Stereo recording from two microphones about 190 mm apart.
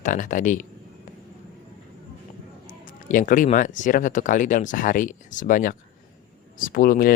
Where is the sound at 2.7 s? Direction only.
45° left (ahead or behind).